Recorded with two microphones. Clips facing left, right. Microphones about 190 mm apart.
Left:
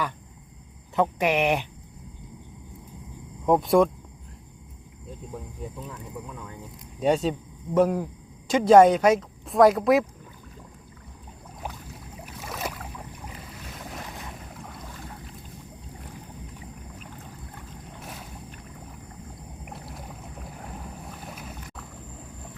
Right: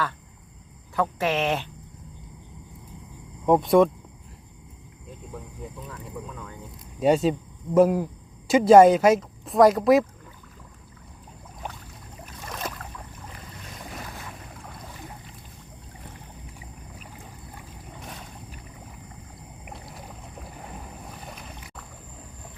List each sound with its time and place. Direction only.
0.9 s speech: 15° left (ahead or behind)
3.4 s speech: centre (ahead or behind)
5.9 s speech: 10° left (ahead or behind)
7.0 s speech: 5° right (ahead or behind)
11.6 s boat: 5° left (ahead or behind)
14.5 s boat: centre (ahead or behind)
16.6 s boat: 10° right (ahead or behind)
17.9 s boat: 5° left (ahead or behind)
19.6 s boat: centre (ahead or behind)